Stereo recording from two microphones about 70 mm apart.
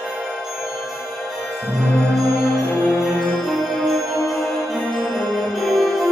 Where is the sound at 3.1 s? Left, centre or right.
Centre.